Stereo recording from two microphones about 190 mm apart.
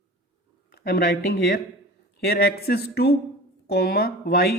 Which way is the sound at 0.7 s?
55° left (ahead or behind).